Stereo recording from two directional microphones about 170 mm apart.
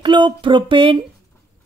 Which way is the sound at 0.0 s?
30° right (ahead or behind).